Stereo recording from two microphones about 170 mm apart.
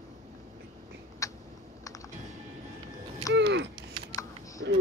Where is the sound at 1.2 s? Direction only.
20° left (ahead or behind).